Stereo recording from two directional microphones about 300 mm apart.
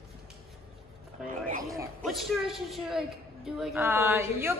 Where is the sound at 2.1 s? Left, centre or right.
Centre.